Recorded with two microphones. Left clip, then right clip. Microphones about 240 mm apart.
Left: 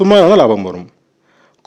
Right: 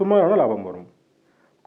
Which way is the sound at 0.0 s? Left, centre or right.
Left.